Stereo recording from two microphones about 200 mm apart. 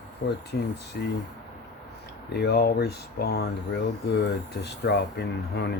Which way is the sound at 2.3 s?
55° left (ahead or behind).